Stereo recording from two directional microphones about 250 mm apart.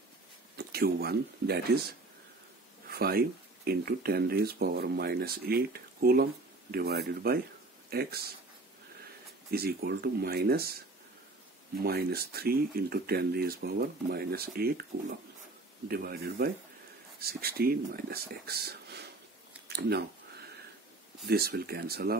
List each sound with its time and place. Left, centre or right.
0.6 s speech: right
9.5 s speech: right
11.8 s speech: right
19.7 s a sound: right
21.3 s speech: right